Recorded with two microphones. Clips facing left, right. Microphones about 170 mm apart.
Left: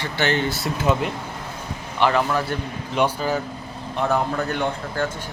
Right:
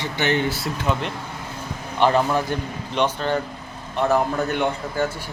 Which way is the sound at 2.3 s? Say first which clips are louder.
Right 1 dB; 20° right (ahead or behind).